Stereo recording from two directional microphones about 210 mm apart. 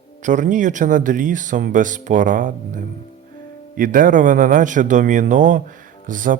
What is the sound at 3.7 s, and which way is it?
Speech, 40° right (ahead or behind).